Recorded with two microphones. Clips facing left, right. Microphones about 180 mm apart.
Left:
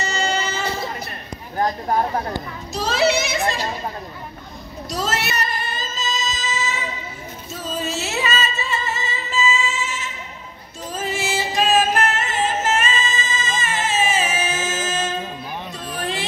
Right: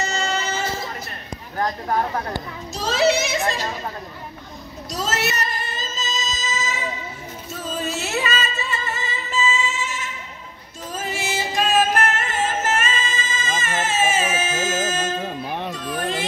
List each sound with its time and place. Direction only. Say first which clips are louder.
0.2 s a sound: left 2 dB; 35° left (ahead or behind)
1.6 s speech: left 2 dB; 25° left (ahead or behind)
2.7 s a child's voice: even; 40° right (ahead or behind)
5.1 s singing: even; 40° right (ahead or behind)
6.0 s music: left 3 dB; 40° right (ahead or behind)
7.7 s music: even; 55° right (ahead or behind)
11.1 s music: left 2 dB; 50° right (ahead or behind)